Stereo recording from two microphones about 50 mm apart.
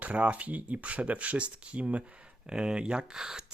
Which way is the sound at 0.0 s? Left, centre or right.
Right.